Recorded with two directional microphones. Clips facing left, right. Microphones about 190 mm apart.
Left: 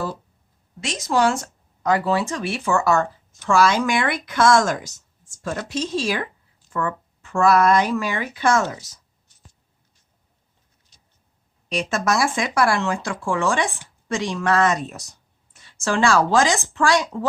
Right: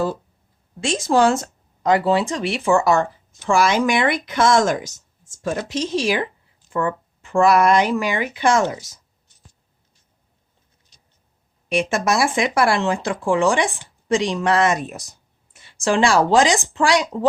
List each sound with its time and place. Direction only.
0.8 s speech: 30° right (ahead or behind)
11.7 s speech: 10° right (ahead or behind)